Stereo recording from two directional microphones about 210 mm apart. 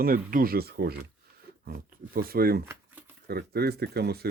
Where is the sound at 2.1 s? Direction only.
45° right (ahead or behind).